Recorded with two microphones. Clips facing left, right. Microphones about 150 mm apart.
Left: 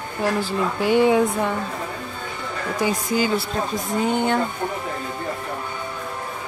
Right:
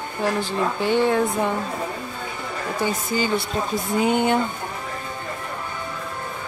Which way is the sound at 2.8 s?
10° left (ahead or behind).